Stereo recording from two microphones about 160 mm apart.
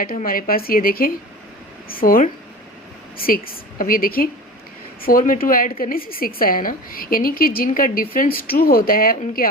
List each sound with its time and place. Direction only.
0.0 s a woman's voice: 65° left (ahead or behind)